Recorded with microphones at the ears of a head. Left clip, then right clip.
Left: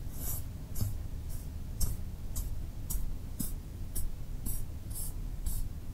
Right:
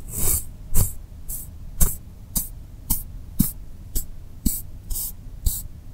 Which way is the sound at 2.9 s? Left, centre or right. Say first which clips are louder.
Right 14 dB; right.